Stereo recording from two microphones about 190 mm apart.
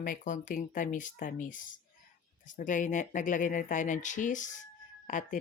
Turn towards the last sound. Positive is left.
turn(degrees=45)  # may be behind; listen again after turning